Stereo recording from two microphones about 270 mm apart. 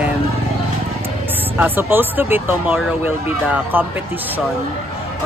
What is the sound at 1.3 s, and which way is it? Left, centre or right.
Speech, centre.